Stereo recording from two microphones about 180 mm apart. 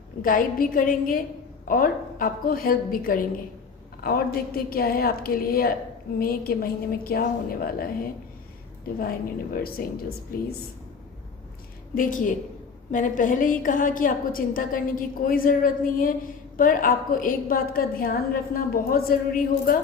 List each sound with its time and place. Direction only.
0.2 s a woman's voice: 50° left (ahead or behind)
9.0 s a woman's voice: 55° left (ahead or behind)
12.9 s a woman's voice: 45° left (ahead or behind)